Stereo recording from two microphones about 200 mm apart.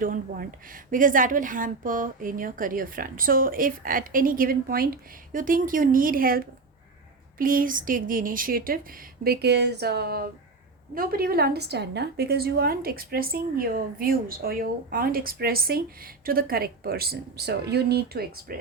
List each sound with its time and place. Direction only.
0.0 s a woman's voice: 45° right (ahead or behind)